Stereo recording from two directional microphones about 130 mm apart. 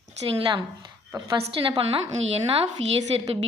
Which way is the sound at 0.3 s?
40° right (ahead or behind).